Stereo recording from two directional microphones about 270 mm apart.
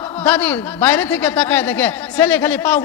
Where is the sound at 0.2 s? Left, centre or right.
Centre.